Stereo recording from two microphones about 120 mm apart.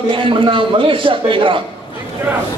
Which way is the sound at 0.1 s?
45° right (ahead or behind).